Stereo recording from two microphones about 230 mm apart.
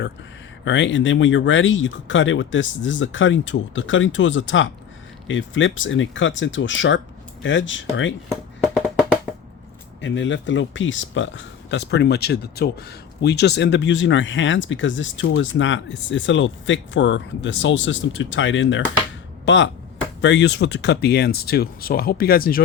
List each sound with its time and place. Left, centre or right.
0.6 s speech: left
8.3 s music: centre
10.0 s speech: left